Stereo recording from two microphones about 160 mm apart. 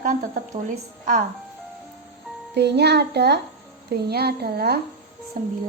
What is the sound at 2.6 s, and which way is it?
A woman's voice, 90° right.